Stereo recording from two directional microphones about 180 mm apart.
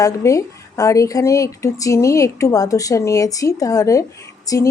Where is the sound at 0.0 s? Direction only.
15° left (ahead or behind).